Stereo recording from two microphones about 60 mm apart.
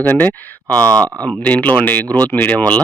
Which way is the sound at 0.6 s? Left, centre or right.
Centre.